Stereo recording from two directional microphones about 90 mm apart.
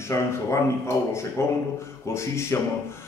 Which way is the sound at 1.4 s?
30° left (ahead or behind).